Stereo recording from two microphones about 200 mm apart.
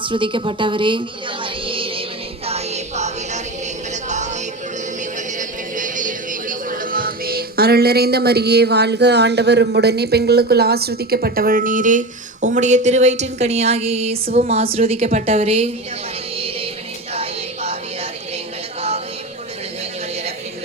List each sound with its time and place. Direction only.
0.0 s a woman's voice: 25° right (ahead or behind)
1.6 s music: 25° right (ahead or behind)
5.4 s music: 40° right (ahead or behind)
14.4 s a woman's voice: 30° right (ahead or behind)
17.2 s child singing: 30° right (ahead or behind)